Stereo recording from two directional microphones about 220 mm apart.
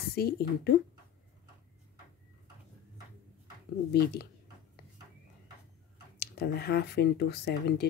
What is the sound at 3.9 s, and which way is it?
Speech, 45° left (ahead or behind).